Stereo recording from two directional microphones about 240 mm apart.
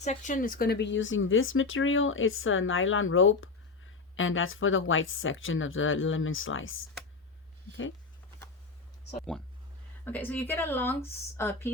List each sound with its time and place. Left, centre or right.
0.0 s speech: left
10.0 s speech: centre